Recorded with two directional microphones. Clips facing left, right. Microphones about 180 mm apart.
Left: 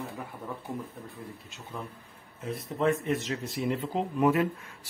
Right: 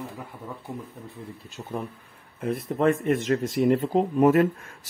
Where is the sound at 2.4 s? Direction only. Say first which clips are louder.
Right 6 dB; 55° right (ahead or behind).